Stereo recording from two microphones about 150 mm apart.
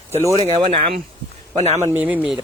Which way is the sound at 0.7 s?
40° right (ahead or behind).